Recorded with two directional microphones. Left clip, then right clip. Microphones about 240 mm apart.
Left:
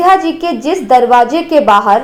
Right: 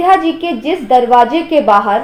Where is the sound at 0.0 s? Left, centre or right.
Left.